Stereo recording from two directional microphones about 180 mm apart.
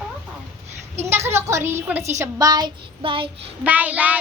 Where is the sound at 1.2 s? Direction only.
15° right (ahead or behind).